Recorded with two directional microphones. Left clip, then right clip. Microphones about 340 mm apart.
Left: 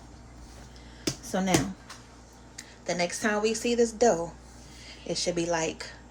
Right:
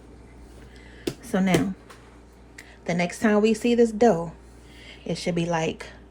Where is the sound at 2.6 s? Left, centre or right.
Centre.